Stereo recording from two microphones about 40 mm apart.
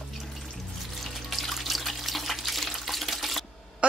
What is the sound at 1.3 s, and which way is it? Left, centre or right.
Water, centre.